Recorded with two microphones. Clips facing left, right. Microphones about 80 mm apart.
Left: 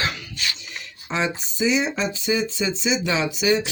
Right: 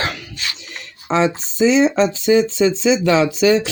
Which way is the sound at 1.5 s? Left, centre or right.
Right.